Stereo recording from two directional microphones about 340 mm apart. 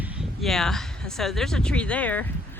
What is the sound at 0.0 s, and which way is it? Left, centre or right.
Speech, centre.